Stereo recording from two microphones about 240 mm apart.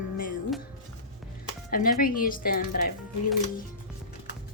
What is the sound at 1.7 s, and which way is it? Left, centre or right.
Speech, left.